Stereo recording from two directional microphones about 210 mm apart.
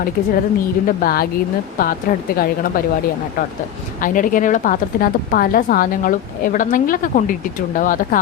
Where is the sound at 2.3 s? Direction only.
45° left (ahead or behind).